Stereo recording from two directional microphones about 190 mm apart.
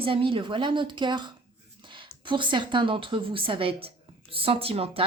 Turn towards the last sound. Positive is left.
turn(degrees=-30)  # may be behind; listen again after turning